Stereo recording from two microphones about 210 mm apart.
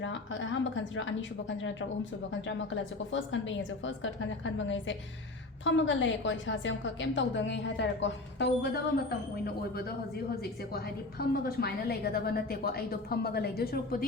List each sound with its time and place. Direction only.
0.0 s a woman's voice: 65° left (ahead or behind)
3.1 s a woman's voice: 65° left (ahead or behind); by 9.9 s 45° left (ahead or behind)
11.2 s a woman's voice: 45° left (ahead or behind)